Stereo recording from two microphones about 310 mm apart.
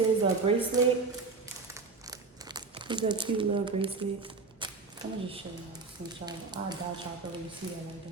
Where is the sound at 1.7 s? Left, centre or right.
Centre.